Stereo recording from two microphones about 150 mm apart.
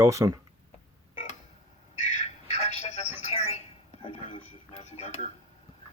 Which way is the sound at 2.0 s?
45° left (ahead or behind).